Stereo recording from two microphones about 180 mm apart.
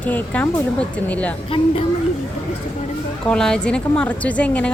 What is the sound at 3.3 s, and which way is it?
A woman's voice, 5° left (ahead or behind).